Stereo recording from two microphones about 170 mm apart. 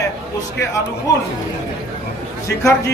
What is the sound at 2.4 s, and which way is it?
Speech, 15° left (ahead or behind).